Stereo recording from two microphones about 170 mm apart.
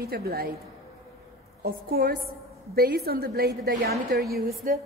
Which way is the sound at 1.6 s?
60° right (ahead or behind).